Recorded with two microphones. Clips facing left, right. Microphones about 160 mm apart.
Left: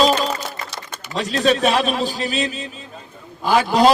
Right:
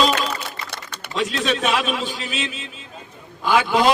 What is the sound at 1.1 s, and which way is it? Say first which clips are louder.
A man's voice: left 4 dB; 40° left (ahead or behind).